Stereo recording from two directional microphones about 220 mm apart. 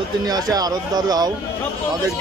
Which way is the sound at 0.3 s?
15° right (ahead or behind).